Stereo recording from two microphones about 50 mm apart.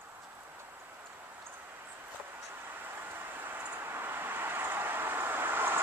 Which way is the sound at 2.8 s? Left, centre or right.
Right.